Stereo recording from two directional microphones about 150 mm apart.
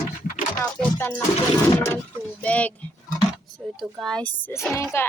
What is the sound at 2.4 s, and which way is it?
Speech, 10° left (ahead or behind).